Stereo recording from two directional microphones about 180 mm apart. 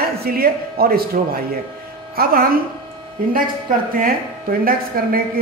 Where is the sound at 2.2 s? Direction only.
55° right (ahead or behind).